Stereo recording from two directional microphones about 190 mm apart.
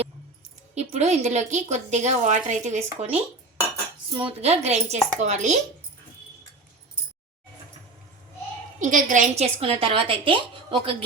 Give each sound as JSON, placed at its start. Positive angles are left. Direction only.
{"t": 0.8, "sound": "a woman's voice", "side_deg": -35}
{"t": 8.8, "sound": "a woman's voice", "side_deg": -40}